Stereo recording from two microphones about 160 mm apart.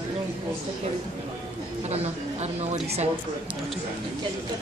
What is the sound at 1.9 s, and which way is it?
A woman's voice, 40° right (ahead or behind).